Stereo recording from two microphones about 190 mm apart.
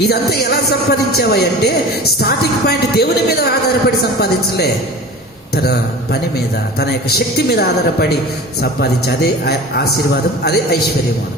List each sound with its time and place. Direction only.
0.1 s a man's voice: 55° left (ahead or behind)
7.3 s a man's voice: 55° left (ahead or behind)